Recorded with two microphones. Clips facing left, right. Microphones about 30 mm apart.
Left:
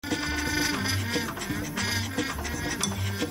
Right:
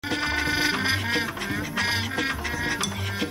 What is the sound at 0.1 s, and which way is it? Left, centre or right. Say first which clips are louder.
Music: right 3 dB; right.